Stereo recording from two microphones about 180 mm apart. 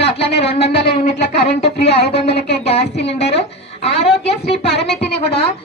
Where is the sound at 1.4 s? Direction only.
65° left (ahead or behind).